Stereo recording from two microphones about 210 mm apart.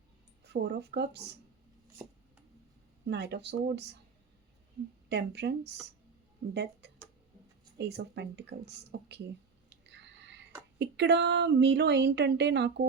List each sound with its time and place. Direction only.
0.4 s speech: 55° right (ahead or behind)
3.1 s speech: 55° right (ahead or behind)
5.0 s speech: 55° right (ahead or behind)